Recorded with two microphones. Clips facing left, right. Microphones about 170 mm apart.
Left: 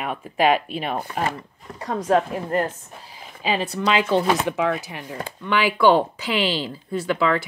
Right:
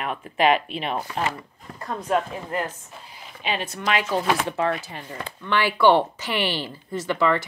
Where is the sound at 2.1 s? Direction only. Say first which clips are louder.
Left 4 dB; 40° left (ahead or behind).